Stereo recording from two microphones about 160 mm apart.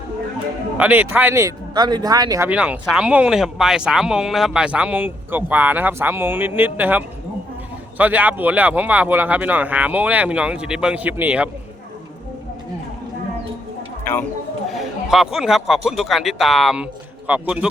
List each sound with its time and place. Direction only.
0.8 s speech: 10° right (ahead or behind)
2.5 s speech: 5° right (ahead or behind)
14.0 s speech: 15° left (ahead or behind)
14.7 s a man's voice: centre (ahead or behind)